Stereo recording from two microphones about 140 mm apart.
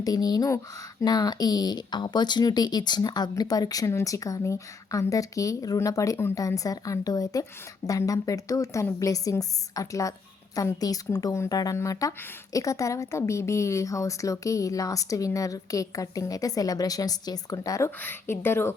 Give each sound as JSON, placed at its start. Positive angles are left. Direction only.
{"t": 0.0, "sound": "speech", "side_deg": 25}